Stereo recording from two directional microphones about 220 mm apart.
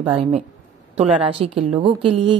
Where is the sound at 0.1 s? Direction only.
25° right (ahead or behind).